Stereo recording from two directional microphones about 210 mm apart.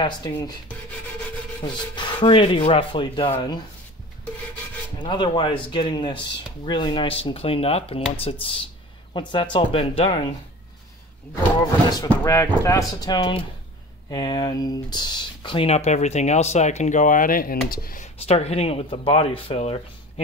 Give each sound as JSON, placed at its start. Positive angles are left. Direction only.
{"t": 0.0, "sound": "speech", "side_deg": 20}
{"t": 1.6, "sound": "speech", "side_deg": 20}
{"t": 4.9, "sound": "speech", "side_deg": 20}
{"t": 12.1, "sound": "speech", "side_deg": 15}